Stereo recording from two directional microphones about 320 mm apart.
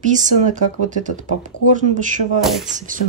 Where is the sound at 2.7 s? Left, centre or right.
Right.